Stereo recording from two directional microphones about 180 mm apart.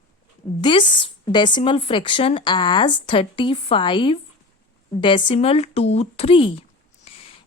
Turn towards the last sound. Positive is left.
turn(degrees=30)  # may be behind; listen again after turning